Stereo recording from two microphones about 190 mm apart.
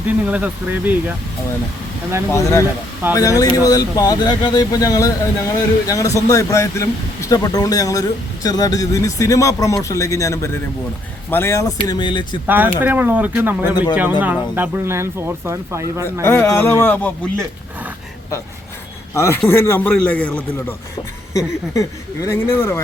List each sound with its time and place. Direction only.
0.3 s speech: 5° right (ahead or behind)
2.3 s speech: 15° left (ahead or behind)
12.5 s speech: 10° right (ahead or behind)
16.2 s speech: 10° left (ahead or behind)
19.1 s speech: 15° left (ahead or behind)